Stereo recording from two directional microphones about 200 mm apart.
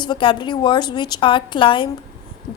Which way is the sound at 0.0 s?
25° left (ahead or behind).